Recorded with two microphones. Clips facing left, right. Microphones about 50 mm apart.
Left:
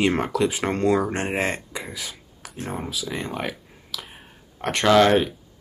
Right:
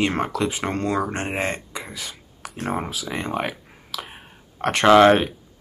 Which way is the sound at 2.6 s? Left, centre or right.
Right.